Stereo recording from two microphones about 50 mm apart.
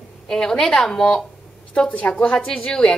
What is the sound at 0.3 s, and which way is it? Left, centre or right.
Speech, centre.